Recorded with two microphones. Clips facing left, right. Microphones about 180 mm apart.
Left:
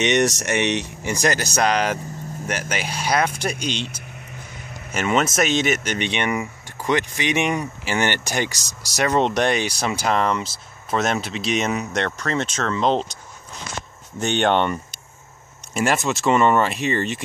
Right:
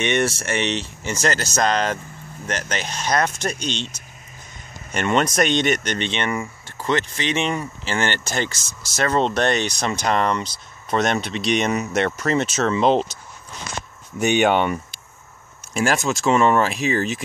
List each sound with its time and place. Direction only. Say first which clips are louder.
0.0 s speech: left 2 dB; 20° left (ahead or behind); by 13.2 s 5° right (ahead or behind)
14.2 s speech: right 2 dB; 10° right (ahead or behind)